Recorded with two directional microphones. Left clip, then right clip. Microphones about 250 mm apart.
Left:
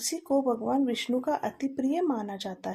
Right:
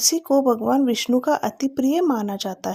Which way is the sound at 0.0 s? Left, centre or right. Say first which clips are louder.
Right 9 dB; right.